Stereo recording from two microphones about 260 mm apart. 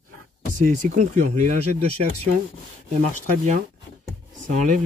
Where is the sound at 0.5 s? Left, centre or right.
Right.